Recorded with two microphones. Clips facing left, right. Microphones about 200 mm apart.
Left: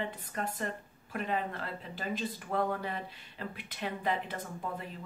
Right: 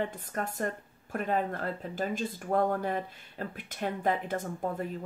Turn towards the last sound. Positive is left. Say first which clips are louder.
# right 6 dB
turn(degrees=-45)  # may be behind; listen again after turning